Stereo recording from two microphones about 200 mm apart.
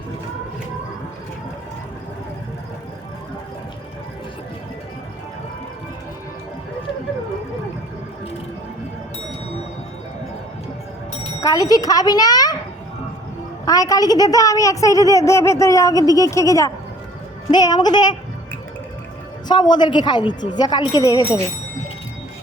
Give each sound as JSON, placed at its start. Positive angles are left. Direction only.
{"t": 11.3, "sound": "speech", "side_deg": 15}
{"t": 13.7, "sound": "a woman's voice", "side_deg": 15}
{"t": 19.5, "sound": "a woman's voice", "side_deg": 20}